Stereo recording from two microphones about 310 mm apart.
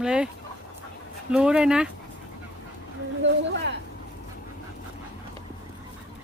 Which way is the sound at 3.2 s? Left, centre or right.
Right.